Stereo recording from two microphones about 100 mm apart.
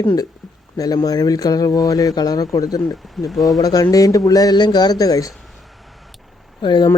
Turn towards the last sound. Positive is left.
turn(degrees=50)  # may be behind; listen again after turning